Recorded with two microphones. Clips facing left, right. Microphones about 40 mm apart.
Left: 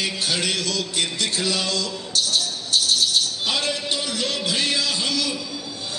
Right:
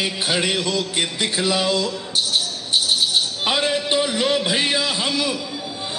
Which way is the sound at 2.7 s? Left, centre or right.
Right.